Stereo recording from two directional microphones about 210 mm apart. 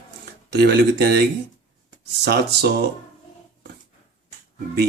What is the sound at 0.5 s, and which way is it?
Speech, 50° right (ahead or behind).